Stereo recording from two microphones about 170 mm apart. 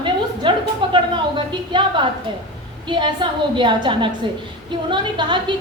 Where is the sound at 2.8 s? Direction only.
30° right (ahead or behind).